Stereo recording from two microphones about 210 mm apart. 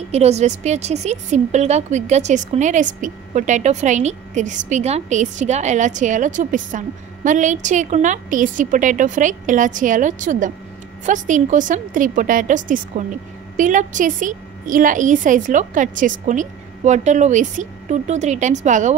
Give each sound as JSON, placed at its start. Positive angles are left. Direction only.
{"t": 0.1, "sound": "a woman's voice", "side_deg": -30}